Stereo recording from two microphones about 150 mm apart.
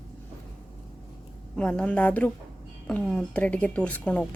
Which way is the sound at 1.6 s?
5° left (ahead or behind).